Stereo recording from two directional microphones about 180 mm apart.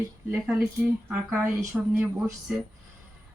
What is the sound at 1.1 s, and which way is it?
Speech, 5° right (ahead or behind).